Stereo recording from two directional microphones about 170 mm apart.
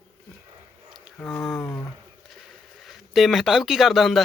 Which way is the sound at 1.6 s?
10° left (ahead or behind).